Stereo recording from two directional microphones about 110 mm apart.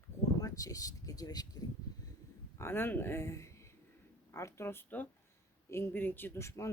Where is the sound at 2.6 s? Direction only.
20° left (ahead or behind).